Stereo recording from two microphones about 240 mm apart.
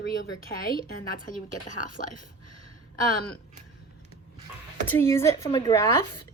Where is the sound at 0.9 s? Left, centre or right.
Left.